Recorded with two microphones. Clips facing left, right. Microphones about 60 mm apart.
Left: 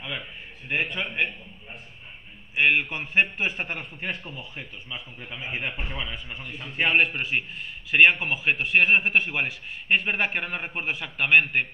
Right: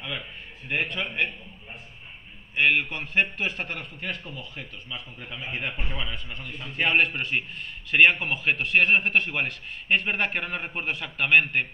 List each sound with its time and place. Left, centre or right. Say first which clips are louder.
0.7 s a man's voice: left 1 dB; centre
2.5 s a man's voice: left 1 dB; centre
4.1 s a man's voice: left 1 dB; centre
4.4 s a man's voice: even; centre